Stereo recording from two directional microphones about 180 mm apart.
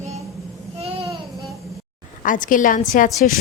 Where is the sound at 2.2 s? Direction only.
50° left (ahead or behind).